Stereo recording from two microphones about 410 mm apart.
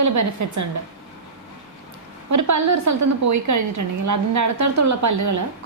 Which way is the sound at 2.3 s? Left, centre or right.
Right.